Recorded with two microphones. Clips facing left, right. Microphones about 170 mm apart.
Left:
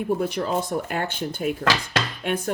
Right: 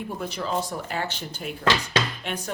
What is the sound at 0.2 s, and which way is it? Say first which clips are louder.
Speech: left 4 dB; 50° left (ahead or behind).